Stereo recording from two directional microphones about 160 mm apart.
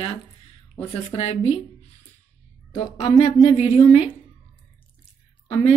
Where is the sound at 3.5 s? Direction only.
40° left (ahead or behind).